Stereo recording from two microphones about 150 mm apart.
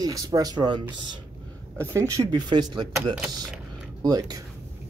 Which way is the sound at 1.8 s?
20° right (ahead or behind).